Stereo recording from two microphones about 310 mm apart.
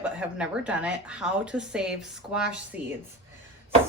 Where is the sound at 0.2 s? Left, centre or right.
Centre.